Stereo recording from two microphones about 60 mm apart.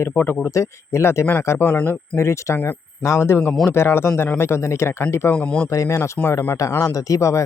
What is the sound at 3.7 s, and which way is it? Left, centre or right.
Speech, left.